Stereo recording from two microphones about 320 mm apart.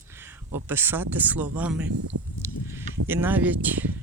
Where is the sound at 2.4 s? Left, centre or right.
Centre.